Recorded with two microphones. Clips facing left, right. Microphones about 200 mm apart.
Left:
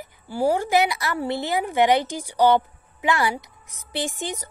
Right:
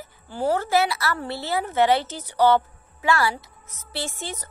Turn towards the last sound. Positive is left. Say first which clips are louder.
# left 4 dB
turn(degrees=15)  # may be behind; listen again after turning